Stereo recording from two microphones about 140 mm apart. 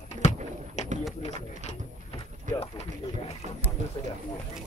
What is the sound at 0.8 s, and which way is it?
Pigeon, 55° left (ahead or behind).